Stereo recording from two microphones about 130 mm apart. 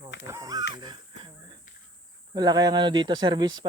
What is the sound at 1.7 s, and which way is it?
Insect, 90° left.